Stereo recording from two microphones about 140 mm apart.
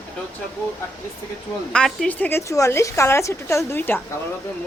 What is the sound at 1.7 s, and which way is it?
A woman's voice, 5° left (ahead or behind).